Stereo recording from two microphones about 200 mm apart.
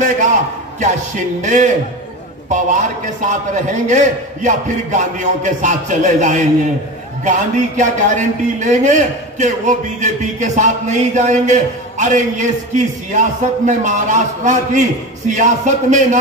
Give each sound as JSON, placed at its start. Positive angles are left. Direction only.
{"t": 1.4, "sound": "a man's voice", "side_deg": -35}